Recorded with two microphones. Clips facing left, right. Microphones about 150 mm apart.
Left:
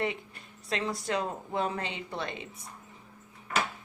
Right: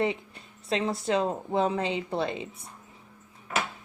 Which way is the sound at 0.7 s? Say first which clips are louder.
Right 5 dB; 25° right (ahead or behind).